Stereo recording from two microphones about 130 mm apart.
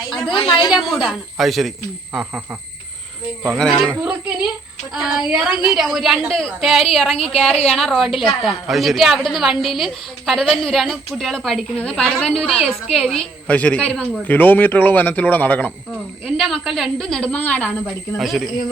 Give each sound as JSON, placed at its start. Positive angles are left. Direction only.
{"t": 0.1, "sound": "a woman's voice", "side_deg": 0}
{"t": 0.3, "sound": "a woman's voice", "side_deg": 40}
{"t": 0.7, "sound": "a woman's voice", "side_deg": 0}
{"t": 3.5, "sound": "a woman's voice", "side_deg": 5}
{"t": 4.9, "sound": "a woman's voice", "side_deg": 0}
{"t": 16.2, "sound": "a woman's voice", "side_deg": 0}
{"t": 18.2, "sound": "a woman's voice", "side_deg": 0}